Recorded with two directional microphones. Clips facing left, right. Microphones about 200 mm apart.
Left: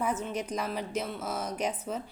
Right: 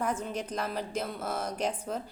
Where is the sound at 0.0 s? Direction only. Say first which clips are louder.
Left 1 dB; 5° left (ahead or behind).